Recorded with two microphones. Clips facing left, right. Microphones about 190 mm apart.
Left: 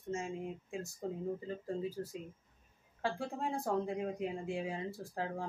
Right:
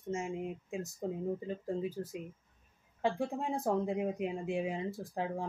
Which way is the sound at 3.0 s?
20° right (ahead or behind).